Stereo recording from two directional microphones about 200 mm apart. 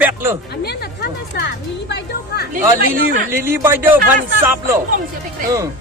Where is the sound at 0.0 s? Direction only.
10° right (ahead or behind).